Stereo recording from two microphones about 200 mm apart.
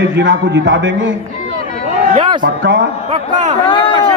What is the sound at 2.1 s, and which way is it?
Speech, 25° right (ahead or behind).